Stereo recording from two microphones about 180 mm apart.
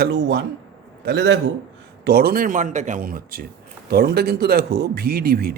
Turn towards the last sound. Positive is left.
turn(degrees=-55)  # may be behind; listen again after turning